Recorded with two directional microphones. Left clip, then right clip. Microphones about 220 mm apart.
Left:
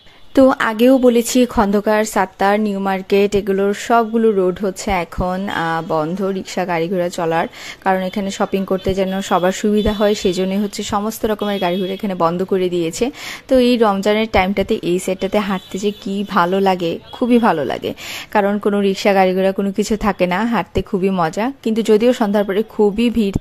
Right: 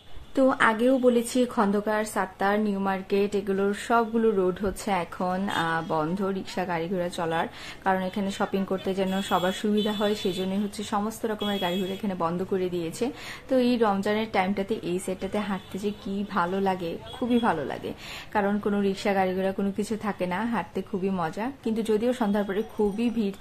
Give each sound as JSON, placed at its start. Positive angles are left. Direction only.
{"t": 0.3, "sound": "a woman's voice", "side_deg": 40}